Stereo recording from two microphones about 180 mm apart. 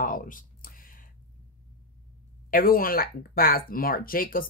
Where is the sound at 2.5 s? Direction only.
55° left (ahead or behind).